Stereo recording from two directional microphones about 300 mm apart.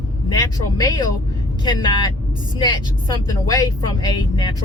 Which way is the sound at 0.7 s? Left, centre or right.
Centre.